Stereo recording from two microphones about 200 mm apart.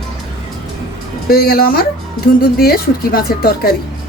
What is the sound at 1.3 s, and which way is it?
Speech, 50° left (ahead or behind).